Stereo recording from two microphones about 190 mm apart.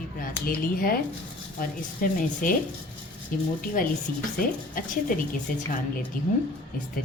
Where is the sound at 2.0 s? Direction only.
45° left (ahead or behind).